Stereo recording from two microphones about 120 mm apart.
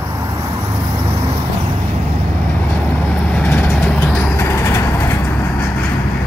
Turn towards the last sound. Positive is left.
turn(degrees=20)  # may be behind; listen again after turning